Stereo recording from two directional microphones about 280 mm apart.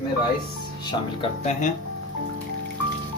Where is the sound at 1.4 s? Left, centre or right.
Left.